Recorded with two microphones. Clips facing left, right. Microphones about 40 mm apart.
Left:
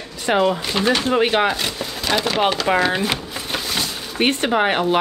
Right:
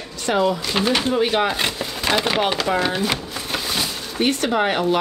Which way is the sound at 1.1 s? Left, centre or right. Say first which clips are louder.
Left 2 dB; left.